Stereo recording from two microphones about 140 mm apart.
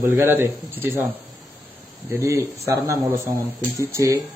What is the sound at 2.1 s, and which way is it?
Speech, 20° right (ahead or behind).